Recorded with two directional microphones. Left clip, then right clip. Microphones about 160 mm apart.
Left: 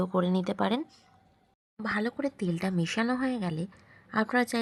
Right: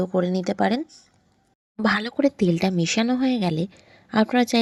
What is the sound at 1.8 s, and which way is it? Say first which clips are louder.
Speech: right 10 dB; 45° right (ahead or behind).